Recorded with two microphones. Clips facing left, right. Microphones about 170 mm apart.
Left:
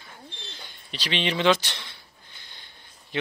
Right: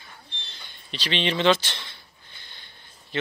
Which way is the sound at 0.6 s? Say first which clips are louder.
Right 2 dB; 10° left (ahead or behind).